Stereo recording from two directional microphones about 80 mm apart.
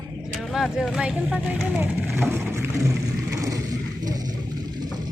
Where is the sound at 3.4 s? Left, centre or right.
Right.